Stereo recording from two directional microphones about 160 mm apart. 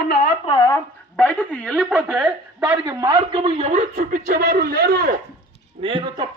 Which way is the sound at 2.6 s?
15° right (ahead or behind).